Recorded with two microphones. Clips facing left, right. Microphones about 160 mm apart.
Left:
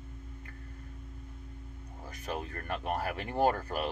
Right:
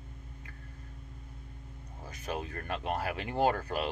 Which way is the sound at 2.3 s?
20° right (ahead or behind).